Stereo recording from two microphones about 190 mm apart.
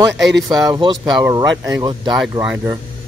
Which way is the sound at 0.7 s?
25° right (ahead or behind).